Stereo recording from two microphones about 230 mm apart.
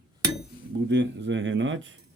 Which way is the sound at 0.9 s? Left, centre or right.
Right.